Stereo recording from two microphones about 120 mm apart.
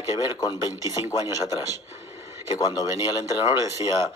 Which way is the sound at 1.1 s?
30° left (ahead or behind).